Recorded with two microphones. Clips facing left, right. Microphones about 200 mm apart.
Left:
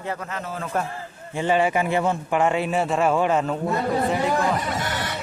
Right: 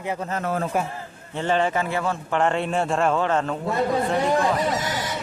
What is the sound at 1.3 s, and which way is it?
Speech, 10° left (ahead or behind).